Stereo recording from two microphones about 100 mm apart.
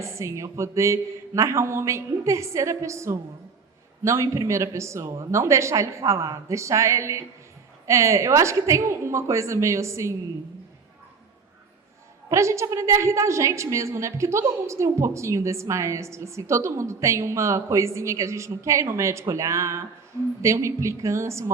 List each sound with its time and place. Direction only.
0.0 s a woman's voice: 30° right (ahead or behind)
12.3 s a woman's voice: 30° right (ahead or behind)